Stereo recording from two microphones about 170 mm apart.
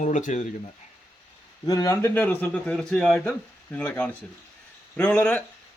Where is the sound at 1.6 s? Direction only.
20° left (ahead or behind); by 5.4 s 5° left (ahead or behind).